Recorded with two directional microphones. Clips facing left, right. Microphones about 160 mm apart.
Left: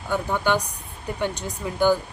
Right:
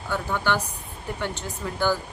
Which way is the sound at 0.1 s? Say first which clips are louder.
Left 3 dB; 15° left (ahead or behind).